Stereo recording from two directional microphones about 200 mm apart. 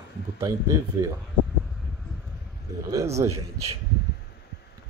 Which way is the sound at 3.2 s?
15° right (ahead or behind).